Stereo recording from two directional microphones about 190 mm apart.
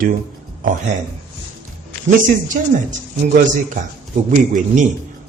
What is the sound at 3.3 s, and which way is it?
A man's voice, 45° right (ahead or behind).